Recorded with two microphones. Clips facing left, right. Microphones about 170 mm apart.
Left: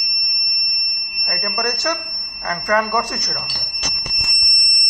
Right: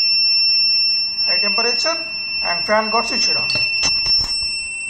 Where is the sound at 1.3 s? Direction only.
15° right (ahead or behind).